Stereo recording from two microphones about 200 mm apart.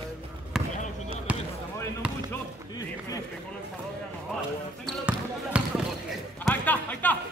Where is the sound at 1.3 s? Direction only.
5° right (ahead or behind).